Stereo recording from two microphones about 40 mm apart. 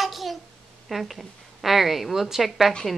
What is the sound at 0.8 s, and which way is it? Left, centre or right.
A woman's voice, centre.